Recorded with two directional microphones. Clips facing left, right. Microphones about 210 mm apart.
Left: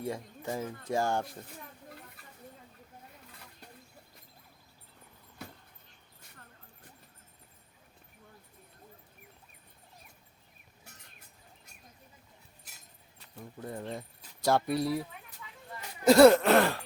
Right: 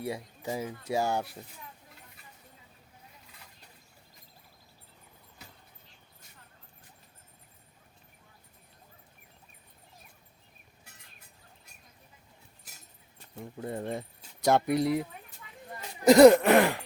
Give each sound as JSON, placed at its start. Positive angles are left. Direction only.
{"t": 0.0, "sound": "speech", "side_deg": -10}
{"t": 13.3, "sound": "speech", "side_deg": -25}
{"t": 16.0, "sound": "speech", "side_deg": -15}